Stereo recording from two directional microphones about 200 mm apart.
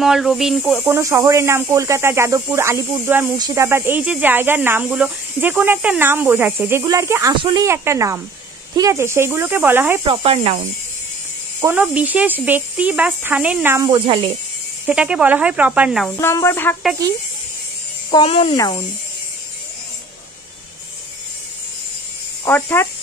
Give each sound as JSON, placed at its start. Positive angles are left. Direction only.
{"t": 0.0, "sound": "speech", "side_deg": 0}
{"t": 0.9, "sound": "speech", "side_deg": -15}
{"t": 10.0, "sound": "speech", "side_deg": -25}
{"t": 11.6, "sound": "speech", "side_deg": -5}
{"t": 14.9, "sound": "speech", "side_deg": -5}
{"t": 16.2, "sound": "speech", "side_deg": 15}
{"t": 18.1, "sound": "speech", "side_deg": 30}
{"t": 22.4, "sound": "speech", "side_deg": 10}